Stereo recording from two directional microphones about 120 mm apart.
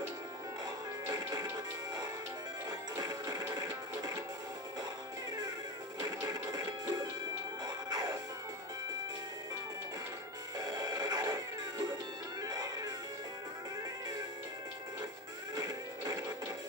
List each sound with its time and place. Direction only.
1.0 s music: 35° right (ahead or behind)
3.0 s music: 35° right (ahead or behind)
5.9 s music: 35° right (ahead or behind)
10.6 s music: 35° right (ahead or behind)
15.5 s music: 35° right (ahead or behind)